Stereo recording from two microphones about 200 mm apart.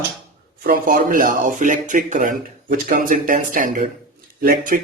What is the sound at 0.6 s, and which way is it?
Speech, 45° right (ahead or behind).